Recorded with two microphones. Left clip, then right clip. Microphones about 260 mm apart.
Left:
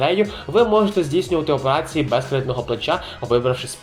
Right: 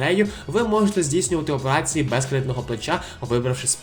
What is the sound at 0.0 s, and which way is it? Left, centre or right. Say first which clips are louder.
Speech: left 3 dB; right.